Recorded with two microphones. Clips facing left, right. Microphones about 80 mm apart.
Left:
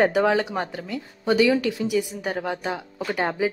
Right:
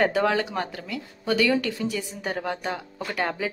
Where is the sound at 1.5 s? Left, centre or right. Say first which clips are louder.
Left 3 dB; centre.